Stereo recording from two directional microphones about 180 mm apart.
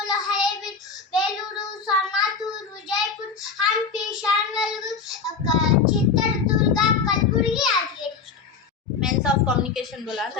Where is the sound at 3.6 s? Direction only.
Centre (ahead or behind).